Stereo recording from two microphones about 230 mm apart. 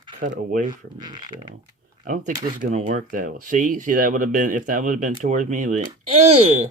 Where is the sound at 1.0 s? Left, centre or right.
Centre.